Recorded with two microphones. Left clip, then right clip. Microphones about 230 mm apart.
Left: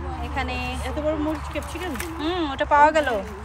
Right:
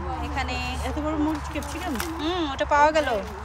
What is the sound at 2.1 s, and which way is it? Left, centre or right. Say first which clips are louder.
Speech: left 3 dB; centre.